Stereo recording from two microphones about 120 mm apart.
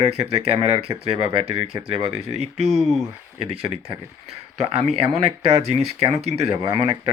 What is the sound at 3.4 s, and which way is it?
Speech, 55° right (ahead or behind).